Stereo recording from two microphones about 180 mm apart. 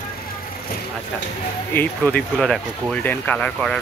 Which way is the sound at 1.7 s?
10° left (ahead or behind).